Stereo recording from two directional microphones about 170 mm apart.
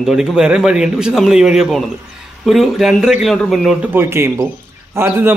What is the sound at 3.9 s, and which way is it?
Speech, 15° right (ahead or behind).